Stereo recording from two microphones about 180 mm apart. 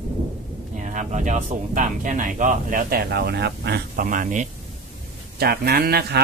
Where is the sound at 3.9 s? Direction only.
50° right (ahead or behind).